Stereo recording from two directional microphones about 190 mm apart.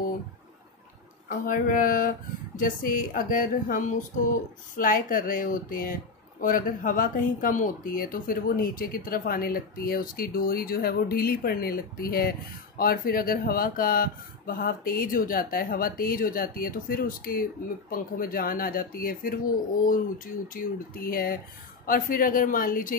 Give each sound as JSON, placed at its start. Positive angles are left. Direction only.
{"t": 1.4, "sound": "speech", "side_deg": 45}
{"t": 20.5, "sound": "speech", "side_deg": 50}